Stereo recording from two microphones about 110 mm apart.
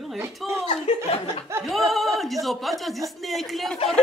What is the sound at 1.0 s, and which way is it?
Speech, 70° left (ahead or behind).